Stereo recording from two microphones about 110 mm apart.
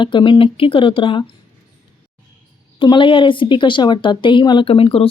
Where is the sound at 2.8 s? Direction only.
45° left (ahead or behind).